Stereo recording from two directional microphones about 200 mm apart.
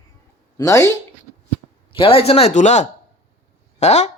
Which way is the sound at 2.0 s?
25° left (ahead or behind).